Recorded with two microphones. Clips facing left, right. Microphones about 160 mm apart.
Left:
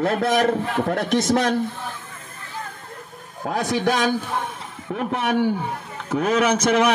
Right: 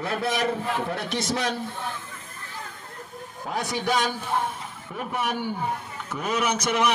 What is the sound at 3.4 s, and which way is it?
Speech, 65° left (ahead or behind).